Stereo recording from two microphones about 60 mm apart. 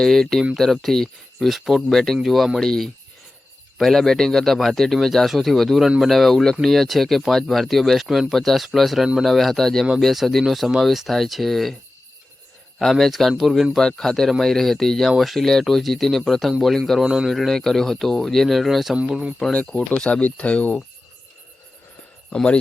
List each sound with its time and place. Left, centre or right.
0.0 s speech: centre
12.8 s speech: centre
17.1 s speech: centre
17.3 s speech: centre
18.9 s speech: centre
19.9 s speech: centre
22.3 s speech: left